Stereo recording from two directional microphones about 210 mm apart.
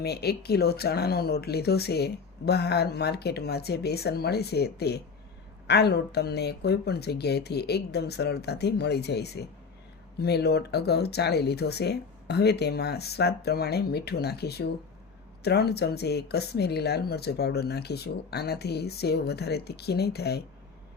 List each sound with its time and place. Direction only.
0.0 s speech: 50° left (ahead or behind)